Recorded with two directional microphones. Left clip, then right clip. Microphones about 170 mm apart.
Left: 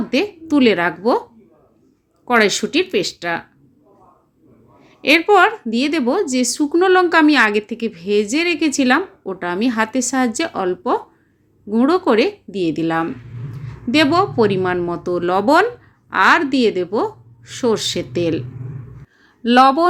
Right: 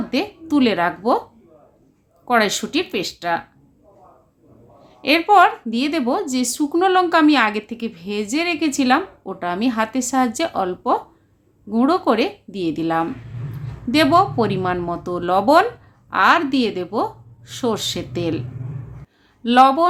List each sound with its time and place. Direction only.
0.1 s a woman's voice: 15° left (ahead or behind)
2.2 s a woman's voice: 15° left (ahead or behind)
4.8 s a woman's voice: 15° left (ahead or behind)